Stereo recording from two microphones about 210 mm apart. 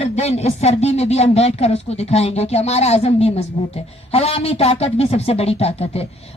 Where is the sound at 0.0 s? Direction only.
30° left (ahead or behind).